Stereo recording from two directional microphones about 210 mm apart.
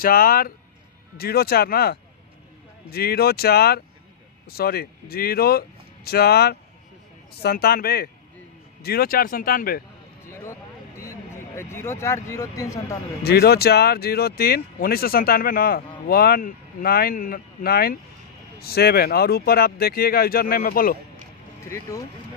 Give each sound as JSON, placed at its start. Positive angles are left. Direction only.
{"t": 0.0, "sound": "speech", "side_deg": 45}
{"t": 10.3, "sound": "a sound", "side_deg": 15}
{"t": 13.2, "sound": "speech", "side_deg": 50}
{"t": 21.6, "sound": "speech", "side_deg": 15}